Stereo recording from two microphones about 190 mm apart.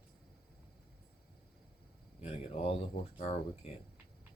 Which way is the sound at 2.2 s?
30° left (ahead or behind).